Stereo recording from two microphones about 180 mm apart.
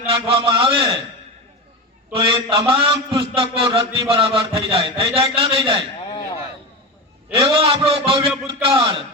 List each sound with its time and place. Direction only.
0.0 s a sound: 30° right (ahead or behind)
2.1 s a man's voice: 30° right (ahead or behind)
7.3 s a man's voice: 30° right (ahead or behind)